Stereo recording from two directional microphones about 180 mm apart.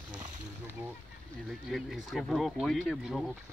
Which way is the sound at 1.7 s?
Centre (ahead or behind).